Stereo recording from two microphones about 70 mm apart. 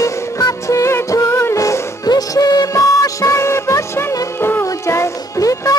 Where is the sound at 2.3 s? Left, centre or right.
Left.